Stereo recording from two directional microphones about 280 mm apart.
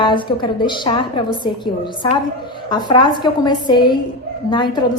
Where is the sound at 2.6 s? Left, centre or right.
Centre.